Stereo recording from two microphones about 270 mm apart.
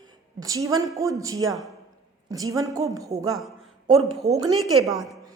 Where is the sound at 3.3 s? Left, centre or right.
Centre.